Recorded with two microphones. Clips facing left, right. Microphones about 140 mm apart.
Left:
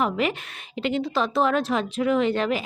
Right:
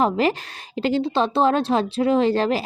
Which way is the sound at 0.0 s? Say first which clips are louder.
Right 5 dB; 35° right (ahead or behind).